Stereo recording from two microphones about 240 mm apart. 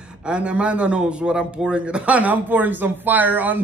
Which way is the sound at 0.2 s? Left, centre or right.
Centre.